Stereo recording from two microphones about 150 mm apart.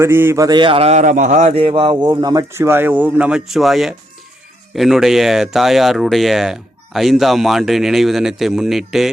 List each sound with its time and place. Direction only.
0.0 s a man's voice: 15° right (ahead or behind); by 1.5 s 50° right (ahead or behind)
1.5 s a man's voice: 35° right (ahead or behind)
2.0 s a man's voice: 20° right (ahead or behind); by 9.0 s centre (ahead or behind)